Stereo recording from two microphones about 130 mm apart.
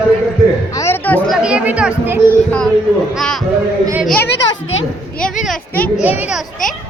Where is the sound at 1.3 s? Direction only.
5° right (ahead or behind).